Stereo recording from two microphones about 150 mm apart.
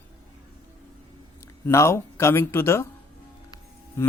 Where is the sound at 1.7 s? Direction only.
20° left (ahead or behind).